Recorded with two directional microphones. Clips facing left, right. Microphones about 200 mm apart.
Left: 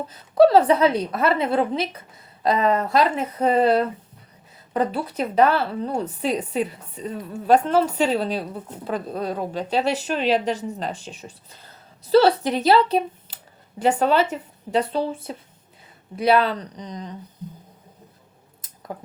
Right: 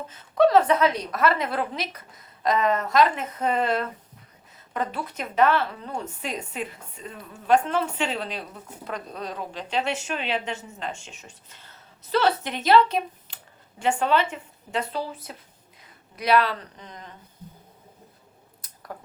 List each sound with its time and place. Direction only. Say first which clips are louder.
0.1 s a woman's voice: left 4 dB; 35° left (ahead or behind)